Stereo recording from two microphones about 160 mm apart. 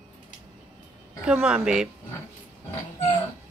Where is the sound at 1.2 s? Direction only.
5° right (ahead or behind).